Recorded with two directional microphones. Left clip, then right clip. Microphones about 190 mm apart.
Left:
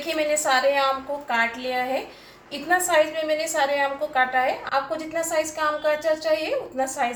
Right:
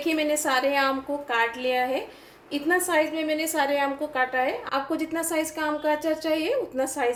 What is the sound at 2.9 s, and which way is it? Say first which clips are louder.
A woman's voice: left 3 dB; 45° right (ahead or behind).